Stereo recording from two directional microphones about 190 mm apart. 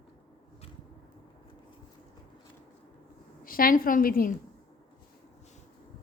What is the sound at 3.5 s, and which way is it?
Speech, 50° left (ahead or behind).